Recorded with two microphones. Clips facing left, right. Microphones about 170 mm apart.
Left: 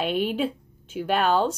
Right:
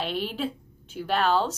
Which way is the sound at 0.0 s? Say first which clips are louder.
Left 5 dB; 15° left (ahead or behind).